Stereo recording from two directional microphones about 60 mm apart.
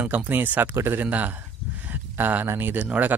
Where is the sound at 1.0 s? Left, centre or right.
Right.